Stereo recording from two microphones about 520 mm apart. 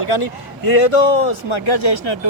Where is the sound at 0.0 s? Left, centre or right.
Left.